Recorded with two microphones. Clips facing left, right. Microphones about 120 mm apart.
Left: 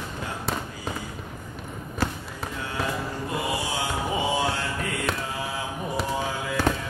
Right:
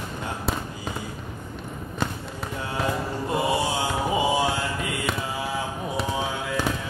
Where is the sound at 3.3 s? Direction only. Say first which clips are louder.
Right 6 dB; 25° right (ahead or behind).